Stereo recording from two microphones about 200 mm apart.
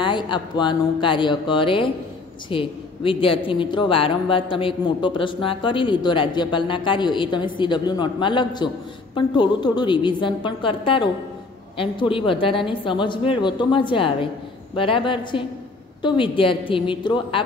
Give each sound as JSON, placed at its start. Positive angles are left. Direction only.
{"t": 0.0, "sound": "speech", "side_deg": 25}